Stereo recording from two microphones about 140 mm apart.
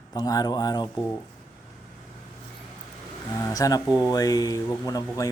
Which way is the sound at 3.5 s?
25° left (ahead or behind).